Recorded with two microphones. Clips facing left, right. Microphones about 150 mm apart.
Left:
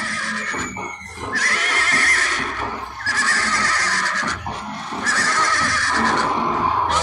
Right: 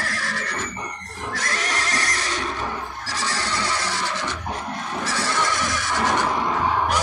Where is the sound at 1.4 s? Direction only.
25° right (ahead or behind).